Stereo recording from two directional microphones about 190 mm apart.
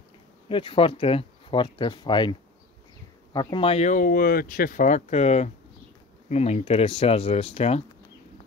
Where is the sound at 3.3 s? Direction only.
25° left (ahead or behind).